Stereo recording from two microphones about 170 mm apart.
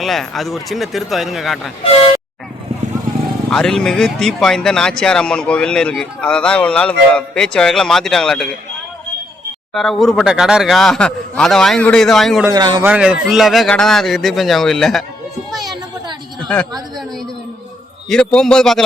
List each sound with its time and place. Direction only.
0.0 s speech: centre (ahead or behind)
3.5 s speech: 5° left (ahead or behind)
9.7 s speech: centre (ahead or behind)
12.5 s speech: 25° right (ahead or behind)
12.8 s speech: 10° right (ahead or behind)
16.5 s a woman's voice: 10° left (ahead or behind)
18.1 s speech: 5° left (ahead or behind)